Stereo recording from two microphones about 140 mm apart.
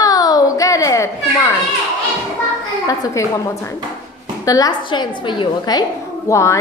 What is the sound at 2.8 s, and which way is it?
A woman's voice, 25° left (ahead or behind).